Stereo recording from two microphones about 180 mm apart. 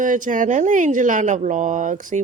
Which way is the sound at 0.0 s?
45° right (ahead or behind).